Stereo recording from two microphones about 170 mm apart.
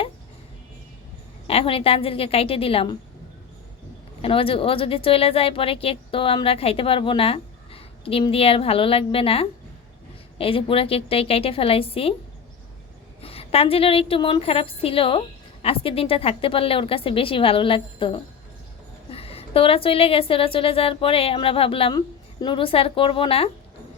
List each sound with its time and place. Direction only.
1.5 s speech: 35° left (ahead or behind)
4.2 s speech: 30° left (ahead or behind)
13.2 s speech: 35° left (ahead or behind)